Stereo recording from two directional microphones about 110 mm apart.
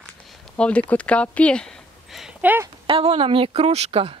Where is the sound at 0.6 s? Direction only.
10° left (ahead or behind).